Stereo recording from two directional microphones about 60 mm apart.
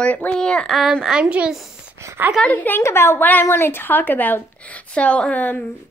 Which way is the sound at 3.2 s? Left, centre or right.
Left.